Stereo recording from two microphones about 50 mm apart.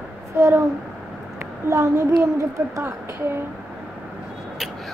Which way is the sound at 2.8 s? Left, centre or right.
Right.